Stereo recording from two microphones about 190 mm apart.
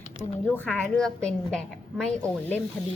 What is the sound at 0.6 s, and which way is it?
A woman's voice, 5° left (ahead or behind).